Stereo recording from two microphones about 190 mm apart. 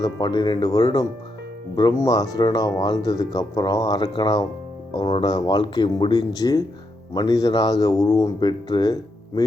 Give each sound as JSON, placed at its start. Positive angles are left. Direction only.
{"t": 0.0, "sound": "speech", "side_deg": 20}